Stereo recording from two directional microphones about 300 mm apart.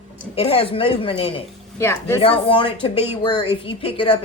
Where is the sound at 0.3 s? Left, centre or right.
Centre.